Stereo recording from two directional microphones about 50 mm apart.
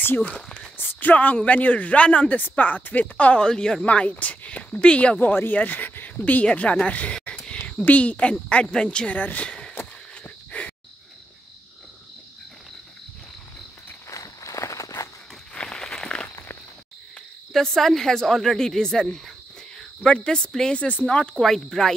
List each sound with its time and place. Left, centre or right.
0.0 s speech: left
0.3 s speech: left
0.7 s speech: left
3.2 s a woman's voice: left
3.4 s speech: centre
3.8 s a woman's voice: left
5.5 s a woman's voice: left
9.2 s speech: left
10.2 s a sound: left
14.0 s walk: left
15.5 s a sound: centre
17.5 s speech: centre
20.8 s a woman's voice: left
21.4 s speech: centre